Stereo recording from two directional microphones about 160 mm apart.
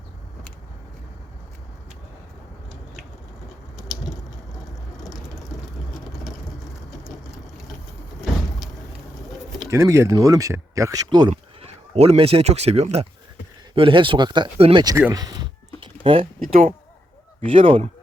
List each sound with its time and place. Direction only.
8.2 s vehicle: centre (ahead or behind)
9.6 s speech: 15° right (ahead or behind)
14.9 s speech: 20° right (ahead or behind)
15.8 s a sound: 35° right (ahead or behind)
16.4 s speech: 55° right (ahead or behind)
17.4 s speech: 35° right (ahead or behind)